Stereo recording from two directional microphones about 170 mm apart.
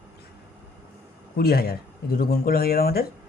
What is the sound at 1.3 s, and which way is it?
Speech, 65° left (ahead or behind).